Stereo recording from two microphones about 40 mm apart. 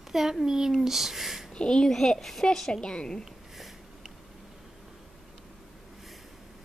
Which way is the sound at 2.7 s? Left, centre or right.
Left.